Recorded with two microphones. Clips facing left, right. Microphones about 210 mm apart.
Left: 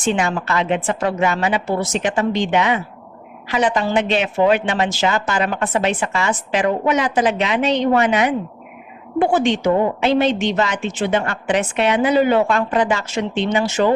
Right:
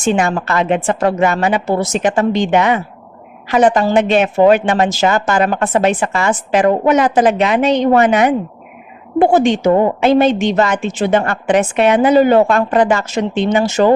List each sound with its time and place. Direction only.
0.0 s speech: 45° right (ahead or behind)